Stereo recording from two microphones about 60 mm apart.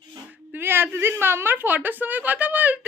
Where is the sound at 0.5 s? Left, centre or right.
Right.